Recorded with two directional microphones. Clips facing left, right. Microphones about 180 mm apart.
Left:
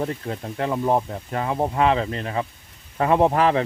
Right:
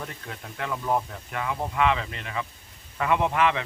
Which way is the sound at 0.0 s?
35° left (ahead or behind).